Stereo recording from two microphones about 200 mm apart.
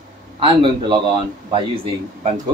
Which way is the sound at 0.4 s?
25° right (ahead or behind).